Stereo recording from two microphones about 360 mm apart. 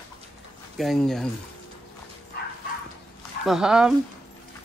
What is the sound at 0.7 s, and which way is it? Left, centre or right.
Speech, centre.